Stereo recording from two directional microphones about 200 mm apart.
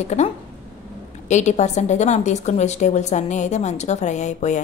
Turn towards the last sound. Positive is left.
turn(degrees=35)  # may be behind; listen again after turning